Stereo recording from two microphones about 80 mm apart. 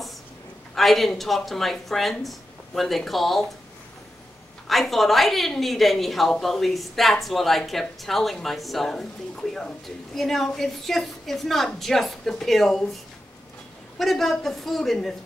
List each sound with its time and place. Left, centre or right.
0.7 s speech: centre
4.6 s speech: centre
13.9 s speech: centre